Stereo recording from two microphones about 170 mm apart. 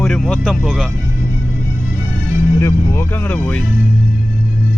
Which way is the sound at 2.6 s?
15° left (ahead or behind).